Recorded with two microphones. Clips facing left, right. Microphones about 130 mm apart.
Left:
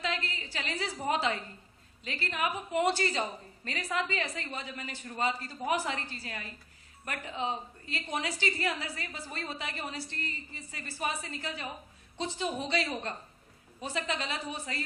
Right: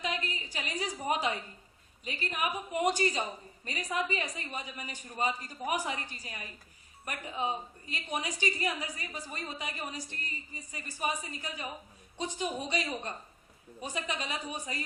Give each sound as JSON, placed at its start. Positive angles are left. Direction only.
{"t": 0.0, "sound": "a woman's voice", "side_deg": -15}